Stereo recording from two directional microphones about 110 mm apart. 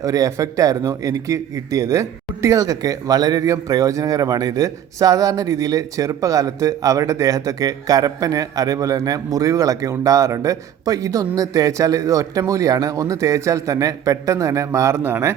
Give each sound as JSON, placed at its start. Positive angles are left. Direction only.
{"t": 0.0, "sound": "a man's voice", "side_deg": -30}